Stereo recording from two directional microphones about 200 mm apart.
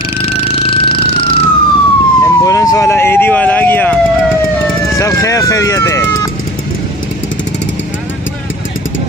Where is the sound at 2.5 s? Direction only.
15° left (ahead or behind).